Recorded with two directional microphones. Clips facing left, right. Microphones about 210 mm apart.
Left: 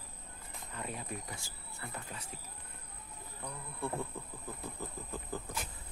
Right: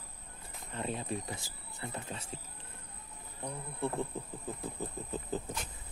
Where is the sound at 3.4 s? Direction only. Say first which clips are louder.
Right 4 dB; 20° right (ahead or behind).